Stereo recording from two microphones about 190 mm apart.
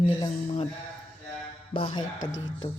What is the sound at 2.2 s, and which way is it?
Speech, 90° left.